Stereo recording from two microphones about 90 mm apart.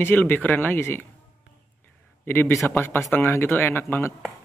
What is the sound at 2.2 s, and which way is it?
A man's voice, 25° left (ahead or behind).